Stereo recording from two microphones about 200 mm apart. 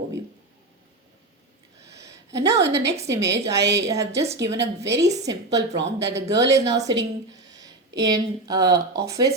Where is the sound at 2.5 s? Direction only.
60° right (ahead or behind).